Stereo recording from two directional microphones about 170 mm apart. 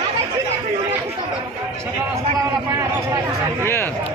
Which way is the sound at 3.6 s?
15° left (ahead or behind).